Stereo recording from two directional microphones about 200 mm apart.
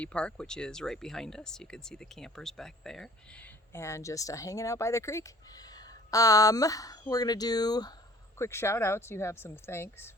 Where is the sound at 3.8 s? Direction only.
15° left (ahead or behind).